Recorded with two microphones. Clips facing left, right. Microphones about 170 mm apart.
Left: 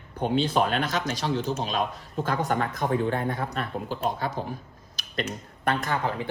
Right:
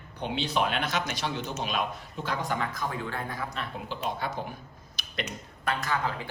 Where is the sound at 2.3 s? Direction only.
55° left (ahead or behind).